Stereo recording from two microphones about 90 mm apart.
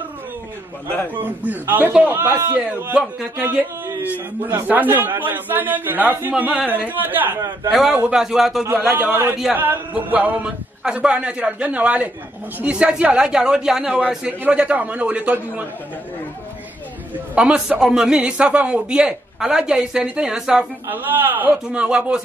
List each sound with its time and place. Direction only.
1.1 s a man's voice: 20° right (ahead or behind)
7.7 s speech: 5° right (ahead or behind)
8.7 s a man's voice: 20° right (ahead or behind)
17.4 s a man's voice: 5° right (ahead or behind)
20.9 s a man's voice: 20° right (ahead or behind)